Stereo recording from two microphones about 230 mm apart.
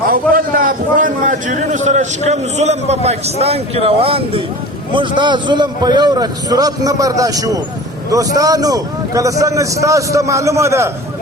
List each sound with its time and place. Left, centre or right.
0.1 s a man's voice: right; by 10.9 s centre